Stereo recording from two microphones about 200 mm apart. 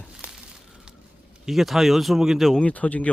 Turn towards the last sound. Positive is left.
turn(degrees=5)  # may be behind; listen again after turning